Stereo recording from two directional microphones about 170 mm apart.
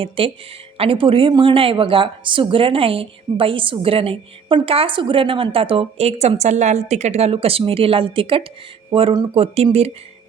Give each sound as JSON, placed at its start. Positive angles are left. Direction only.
{"t": 0.2, "sound": "speech", "side_deg": -30}